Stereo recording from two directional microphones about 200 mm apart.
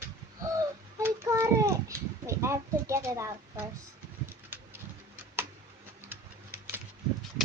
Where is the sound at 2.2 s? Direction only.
15° right (ahead or behind).